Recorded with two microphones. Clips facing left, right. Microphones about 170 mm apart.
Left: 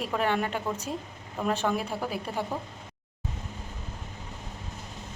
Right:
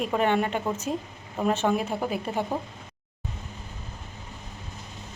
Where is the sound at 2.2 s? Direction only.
25° right (ahead or behind).